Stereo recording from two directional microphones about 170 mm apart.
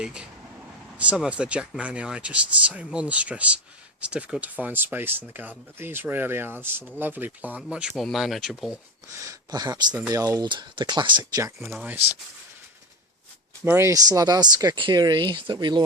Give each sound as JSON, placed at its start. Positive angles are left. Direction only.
{"t": 0.0, "sound": "speech", "side_deg": -5}
{"t": 9.0, "sound": "speech", "side_deg": -20}
{"t": 11.7, "sound": "speech", "side_deg": -5}
{"t": 13.7, "sound": "speech", "side_deg": -15}